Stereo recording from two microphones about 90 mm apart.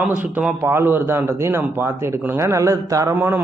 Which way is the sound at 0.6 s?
25° right (ahead or behind).